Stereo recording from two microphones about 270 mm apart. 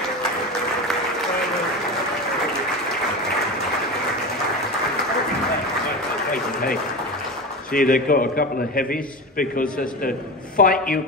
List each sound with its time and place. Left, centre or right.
7.7 s a man's voice: left